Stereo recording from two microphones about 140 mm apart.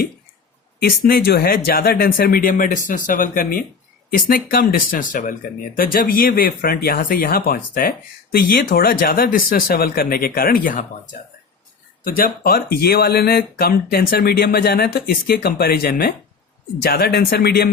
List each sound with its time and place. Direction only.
0.8 s speech: 90° left
4.3 s speech: 90° left; by 11.1 s 70° left (ahead or behind)
12.0 s speech: 90° left